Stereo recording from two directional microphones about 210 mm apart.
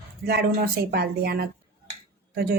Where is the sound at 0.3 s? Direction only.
50° right (ahead or behind).